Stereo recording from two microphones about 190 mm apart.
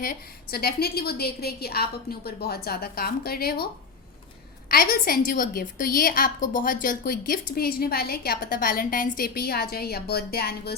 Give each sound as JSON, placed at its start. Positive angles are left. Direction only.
{"t": 0.0, "sound": "a woman's voice", "side_deg": 50}
{"t": 4.7, "sound": "a woman's voice", "side_deg": 50}